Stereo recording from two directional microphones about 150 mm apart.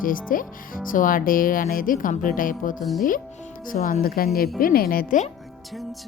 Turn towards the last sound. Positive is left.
turn(degrees=65)  # may be behind; listen again after turning